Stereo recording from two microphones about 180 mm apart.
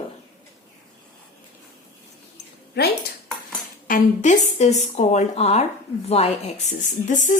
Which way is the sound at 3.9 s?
45° left (ahead or behind).